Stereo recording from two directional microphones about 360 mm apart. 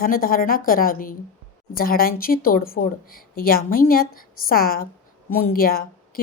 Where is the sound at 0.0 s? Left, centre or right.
Left.